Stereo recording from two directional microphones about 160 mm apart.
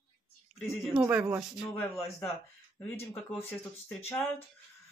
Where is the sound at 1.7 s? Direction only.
15° left (ahead or behind).